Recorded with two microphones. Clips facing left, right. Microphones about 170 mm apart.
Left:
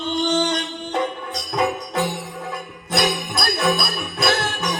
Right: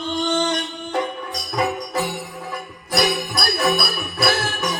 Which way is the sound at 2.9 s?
25° left (ahead or behind).